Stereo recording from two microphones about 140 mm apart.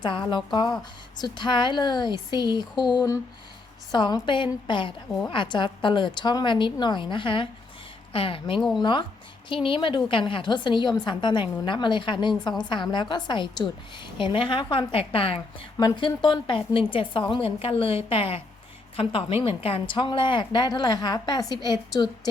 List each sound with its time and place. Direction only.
0.0 s a woman's voice: 35° left (ahead or behind)
8.5 s speech: centre (ahead or behind)
8.8 s a woman's voice: 35° left (ahead or behind)